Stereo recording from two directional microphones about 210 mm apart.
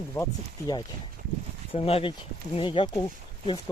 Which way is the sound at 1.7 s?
30° left (ahead or behind).